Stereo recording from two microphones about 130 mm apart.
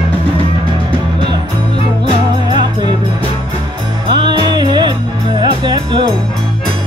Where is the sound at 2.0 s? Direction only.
35° right (ahead or behind).